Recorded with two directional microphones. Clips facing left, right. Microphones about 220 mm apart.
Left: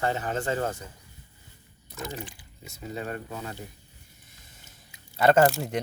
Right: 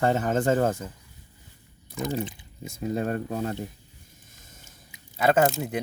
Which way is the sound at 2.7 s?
45° right (ahead or behind).